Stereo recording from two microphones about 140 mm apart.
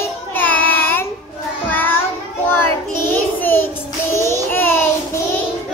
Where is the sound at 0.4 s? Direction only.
10° left (ahead or behind).